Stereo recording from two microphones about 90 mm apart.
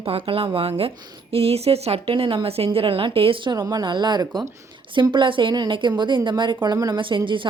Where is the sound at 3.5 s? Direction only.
45° right (ahead or behind).